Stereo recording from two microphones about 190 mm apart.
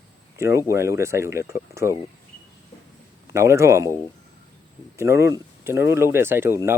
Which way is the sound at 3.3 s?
15° right (ahead or behind).